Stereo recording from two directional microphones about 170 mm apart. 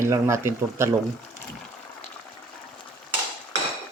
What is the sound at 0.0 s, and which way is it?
Speech, 15° right (ahead or behind).